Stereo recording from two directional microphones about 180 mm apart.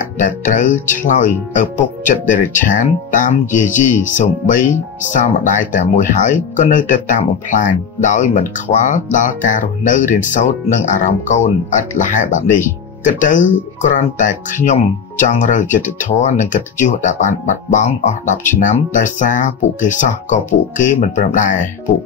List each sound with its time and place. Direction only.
0.2 s speech: 45° left (ahead or behind)